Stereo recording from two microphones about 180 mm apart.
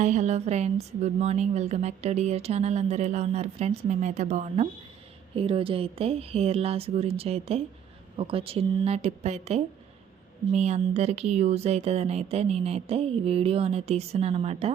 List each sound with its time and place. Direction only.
0.0 s a woman's voice: 45° right (ahead or behind)